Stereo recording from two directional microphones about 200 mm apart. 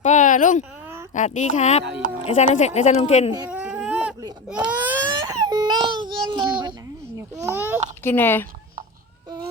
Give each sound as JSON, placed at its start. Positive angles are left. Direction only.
{"t": 0.0, "sound": "a sound", "side_deg": 35}
{"t": 1.1, "sound": "speech", "side_deg": 35}
{"t": 3.5, "sound": "baby cry", "side_deg": -5}
{"t": 5.5, "sound": "a sound", "side_deg": -20}
{"t": 7.2, "sound": "a child's voice", "side_deg": -15}
{"t": 8.0, "sound": "speech", "side_deg": 10}